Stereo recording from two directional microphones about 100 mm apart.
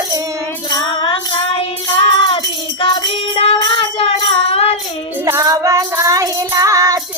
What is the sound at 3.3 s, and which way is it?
Music, 80° left.